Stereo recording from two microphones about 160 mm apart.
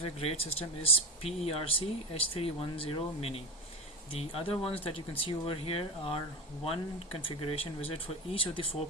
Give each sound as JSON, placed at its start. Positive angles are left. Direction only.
{"t": 0.0, "sound": "speech", "side_deg": 40}